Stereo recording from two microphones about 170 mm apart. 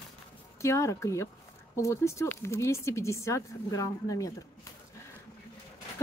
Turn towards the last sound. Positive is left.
turn(degrees=20)  # may be behind; listen again after turning